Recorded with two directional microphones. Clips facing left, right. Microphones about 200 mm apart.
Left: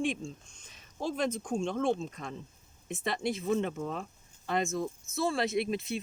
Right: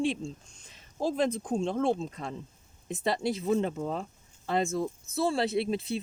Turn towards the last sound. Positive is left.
turn(degrees=-30)  # may be behind; listen again after turning